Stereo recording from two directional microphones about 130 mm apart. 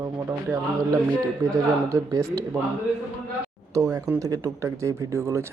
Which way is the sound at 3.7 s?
25° right (ahead or behind).